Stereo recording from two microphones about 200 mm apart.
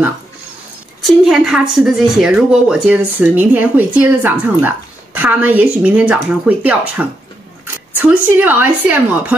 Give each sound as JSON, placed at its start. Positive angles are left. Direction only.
{"t": 1.0, "sound": "a woman's voice", "side_deg": 0}